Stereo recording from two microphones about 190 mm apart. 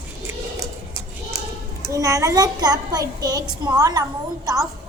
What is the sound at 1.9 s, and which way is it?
A woman's voice, 15° right (ahead or behind).